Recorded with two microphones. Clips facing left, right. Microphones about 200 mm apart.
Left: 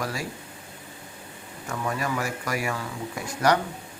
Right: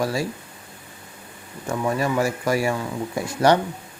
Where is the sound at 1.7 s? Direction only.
25° right (ahead or behind).